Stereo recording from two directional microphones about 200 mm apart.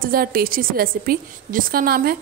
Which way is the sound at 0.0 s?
45° right (ahead or behind).